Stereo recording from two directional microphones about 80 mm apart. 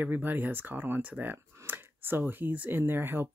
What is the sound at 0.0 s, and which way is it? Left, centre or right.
Speech, right.